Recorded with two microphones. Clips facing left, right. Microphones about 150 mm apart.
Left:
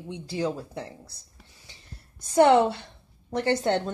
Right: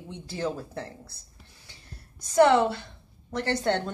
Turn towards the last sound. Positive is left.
turn(degrees=15)  # may be behind; listen again after turning